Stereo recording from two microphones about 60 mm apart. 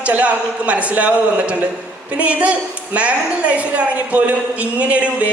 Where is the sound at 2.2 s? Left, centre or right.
Right.